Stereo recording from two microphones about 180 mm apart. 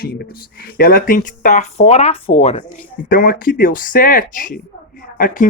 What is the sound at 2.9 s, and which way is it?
Speech, 50° left (ahead or behind).